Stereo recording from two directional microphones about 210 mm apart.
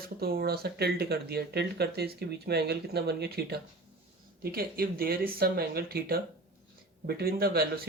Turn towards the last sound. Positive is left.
turn(degrees=-45)  # may be behind; listen again after turning